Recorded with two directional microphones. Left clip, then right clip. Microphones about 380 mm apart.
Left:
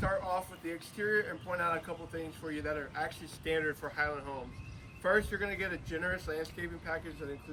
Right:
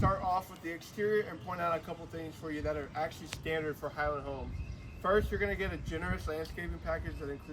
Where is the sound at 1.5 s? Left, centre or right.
Centre.